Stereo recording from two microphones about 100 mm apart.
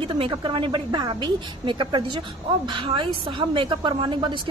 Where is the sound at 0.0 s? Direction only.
55° right (ahead or behind).